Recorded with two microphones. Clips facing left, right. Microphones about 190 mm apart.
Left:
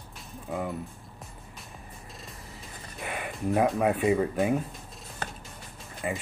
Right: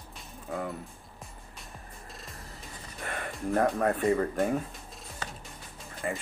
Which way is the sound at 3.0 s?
5° left (ahead or behind).